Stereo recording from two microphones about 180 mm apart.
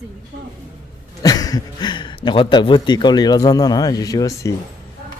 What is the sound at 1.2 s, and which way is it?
Speech, 20° left (ahead or behind).